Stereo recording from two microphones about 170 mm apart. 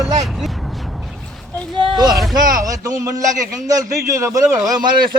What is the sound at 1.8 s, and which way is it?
Speech, 25° right (ahead or behind).